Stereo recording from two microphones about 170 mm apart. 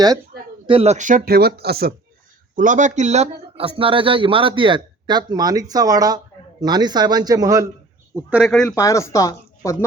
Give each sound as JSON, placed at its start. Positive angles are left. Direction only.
{"t": 0.7, "sound": "speech", "side_deg": -35}
{"t": 2.6, "sound": "a man's voice", "side_deg": -50}
{"t": 8.1, "sound": "speech", "side_deg": -5}
{"t": 8.7, "sound": "speech", "side_deg": 20}